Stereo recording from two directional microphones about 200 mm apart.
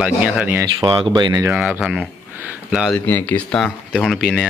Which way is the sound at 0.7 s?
25° right (ahead or behind).